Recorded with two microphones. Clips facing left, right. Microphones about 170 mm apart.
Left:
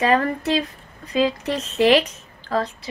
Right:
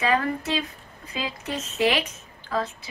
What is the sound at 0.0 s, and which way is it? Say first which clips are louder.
A woman's voice: left 5 dB; 35° left (ahead or behind).